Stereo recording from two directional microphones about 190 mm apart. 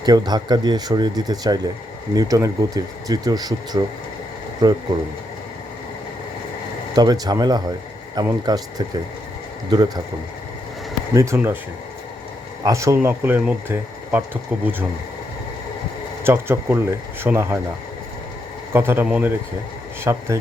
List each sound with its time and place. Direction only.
0.0 s speech: 20° right (ahead or behind)
6.9 s speech: 20° right (ahead or behind)
9.6 s speech: 20° right (ahead or behind)
11.1 s speech: 15° right (ahead or behind)
12.6 s speech: 15° right (ahead or behind)
16.2 s speech: 10° right (ahead or behind)
18.7 s speech: 10° right (ahead or behind)